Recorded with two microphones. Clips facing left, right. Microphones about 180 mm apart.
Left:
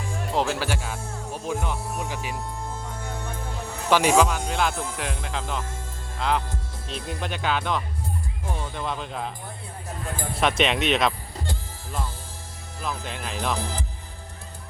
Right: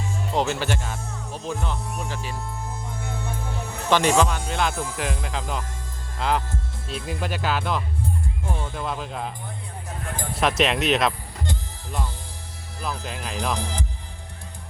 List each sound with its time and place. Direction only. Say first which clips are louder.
0.3 s speech: right 1 dB; 10° left (ahead or behind)
2.8 s music: right 1 dB; 10° right (ahead or behind)
3.8 s speech: even; 10° left (ahead or behind)
10.6 s speech: right 2 dB; centre (ahead or behind)
12.8 s speech: right 1 dB; 5° right (ahead or behind)